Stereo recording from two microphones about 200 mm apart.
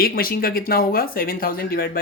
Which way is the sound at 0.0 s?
45° left (ahead or behind).